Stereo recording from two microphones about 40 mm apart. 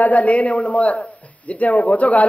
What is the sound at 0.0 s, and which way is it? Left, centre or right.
A man's voice, left.